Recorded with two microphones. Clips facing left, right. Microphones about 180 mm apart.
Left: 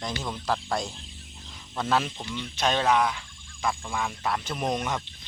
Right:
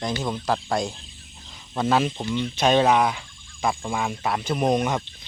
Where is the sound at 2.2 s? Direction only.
25° right (ahead or behind).